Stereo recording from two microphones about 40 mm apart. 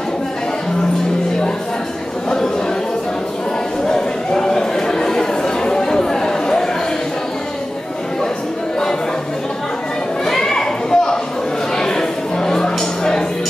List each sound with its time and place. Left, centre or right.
2.2 s chatter: centre
3.8 s chatter: centre
10.2 s a sound: centre
11.7 s music: centre